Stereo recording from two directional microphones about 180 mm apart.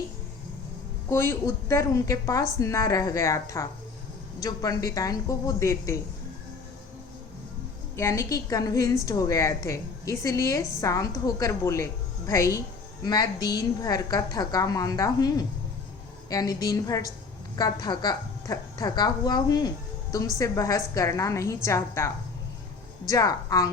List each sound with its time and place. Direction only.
1.1 s a woman's voice: 15° left (ahead or behind)
7.9 s a woman's voice: 15° left (ahead or behind)